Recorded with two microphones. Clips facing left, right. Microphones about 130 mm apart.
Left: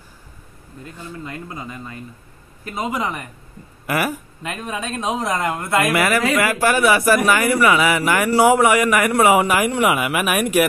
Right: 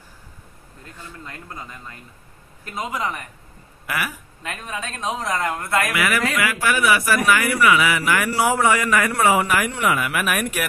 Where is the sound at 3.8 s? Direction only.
40° left (ahead or behind).